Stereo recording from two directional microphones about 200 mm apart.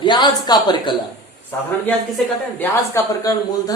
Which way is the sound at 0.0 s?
20° left (ahead or behind).